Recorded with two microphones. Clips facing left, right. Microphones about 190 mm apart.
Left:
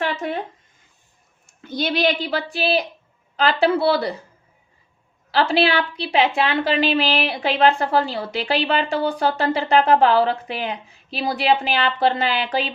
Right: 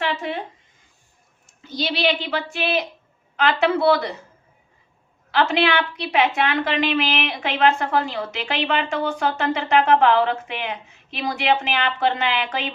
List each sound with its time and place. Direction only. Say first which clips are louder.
0.0 s speech: left 1 dB; 45° left (ahead or behind)
1.5 s a woman's voice: left 2 dB; 55° left (ahead or behind); by 4.1 s 30° left (ahead or behind)
5.3 s a woman's voice: left 1 dB; 35° left (ahead or behind)